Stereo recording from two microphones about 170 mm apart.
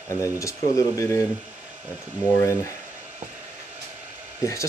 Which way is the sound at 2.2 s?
15° left (ahead or behind).